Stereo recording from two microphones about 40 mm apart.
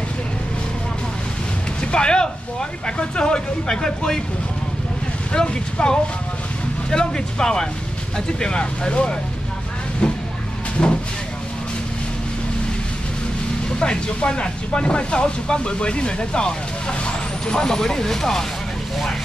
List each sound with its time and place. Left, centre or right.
1.8 s speech: left
5.3 s speech: left
10.8 s speech: left
13.7 s speech: left